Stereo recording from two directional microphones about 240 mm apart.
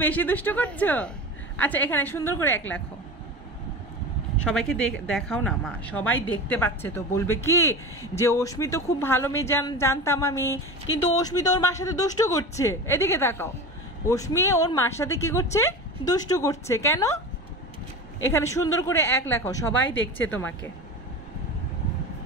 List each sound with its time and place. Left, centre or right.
0.0 s a woman's voice: centre
2.4 s a woman's voice: left
4.5 s a woman's voice: centre
18.3 s a woman's voice: centre